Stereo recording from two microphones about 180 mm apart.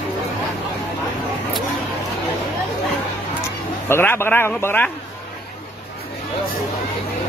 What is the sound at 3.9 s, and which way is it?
A man's voice, 10° left (ahead or behind).